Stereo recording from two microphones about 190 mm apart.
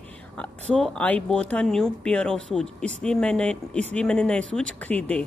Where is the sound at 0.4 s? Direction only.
5° left (ahead or behind).